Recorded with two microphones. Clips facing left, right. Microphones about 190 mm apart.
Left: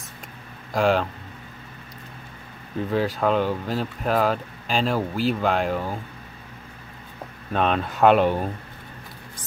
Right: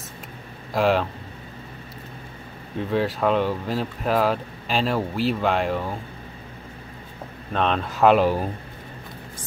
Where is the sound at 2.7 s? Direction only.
Centre (ahead or behind).